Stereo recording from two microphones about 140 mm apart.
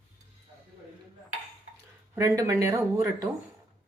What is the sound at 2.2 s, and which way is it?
Speech, 25° right (ahead or behind).